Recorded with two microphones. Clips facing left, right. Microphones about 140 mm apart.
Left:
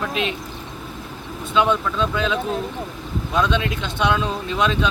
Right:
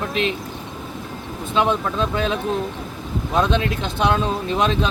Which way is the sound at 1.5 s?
40° right (ahead or behind).